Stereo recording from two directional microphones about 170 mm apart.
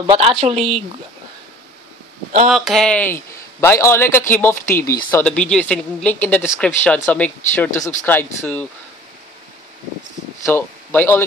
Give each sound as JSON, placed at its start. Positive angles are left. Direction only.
{"t": 0.0, "sound": "a woman's voice", "side_deg": -35}
{"t": 0.6, "sound": "speech", "side_deg": 0}
{"t": 2.5, "sound": "speech", "side_deg": 0}
{"t": 10.4, "sound": "speech", "side_deg": 10}